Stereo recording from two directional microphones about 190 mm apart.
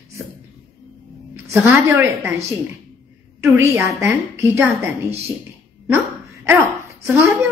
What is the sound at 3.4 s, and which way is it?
A woman's voice, 15° right (ahead or behind).